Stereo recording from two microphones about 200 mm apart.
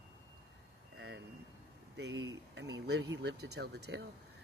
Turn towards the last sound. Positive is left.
turn(degrees=-55)  # may be behind; listen again after turning